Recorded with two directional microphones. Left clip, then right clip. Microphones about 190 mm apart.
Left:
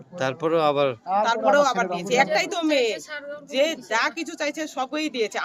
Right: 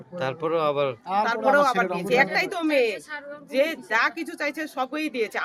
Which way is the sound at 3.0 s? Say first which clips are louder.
Left 2 dB; 60° left (ahead or behind).